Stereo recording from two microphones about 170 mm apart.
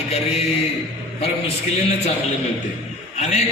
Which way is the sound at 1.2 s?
40° left (ahead or behind).